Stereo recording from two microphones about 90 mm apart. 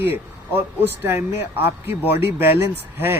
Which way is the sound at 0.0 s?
25° right (ahead or behind).